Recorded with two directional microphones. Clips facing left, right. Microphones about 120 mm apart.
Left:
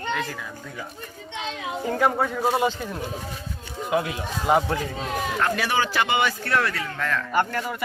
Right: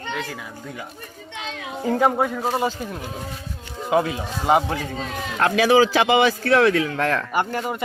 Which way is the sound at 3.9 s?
25° right (ahead or behind).